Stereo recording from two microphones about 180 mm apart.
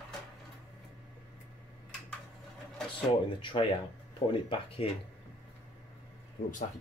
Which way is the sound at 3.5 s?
25° left (ahead or behind).